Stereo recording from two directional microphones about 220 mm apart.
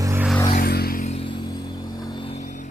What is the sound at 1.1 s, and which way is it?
Vehicle, 25° left (ahead or behind).